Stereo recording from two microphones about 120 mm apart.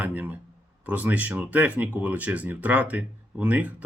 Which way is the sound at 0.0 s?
15° right (ahead or behind).